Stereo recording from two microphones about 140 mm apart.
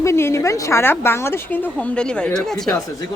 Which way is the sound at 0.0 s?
20° left (ahead or behind).